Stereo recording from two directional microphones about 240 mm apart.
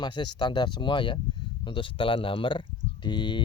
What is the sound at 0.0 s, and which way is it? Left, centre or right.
Speech, centre.